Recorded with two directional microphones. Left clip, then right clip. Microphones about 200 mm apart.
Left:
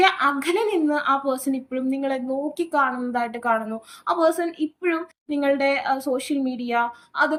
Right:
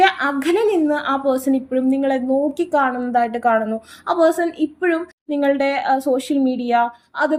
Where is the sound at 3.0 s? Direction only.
40° right (ahead or behind).